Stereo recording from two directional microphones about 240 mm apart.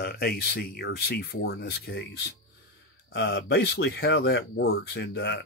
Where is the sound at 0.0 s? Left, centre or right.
Left.